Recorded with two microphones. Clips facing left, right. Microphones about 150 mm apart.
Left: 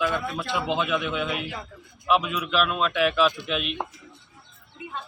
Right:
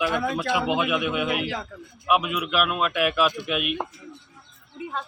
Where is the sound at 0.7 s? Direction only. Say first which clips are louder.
Right 2 dB; 10° right (ahead or behind).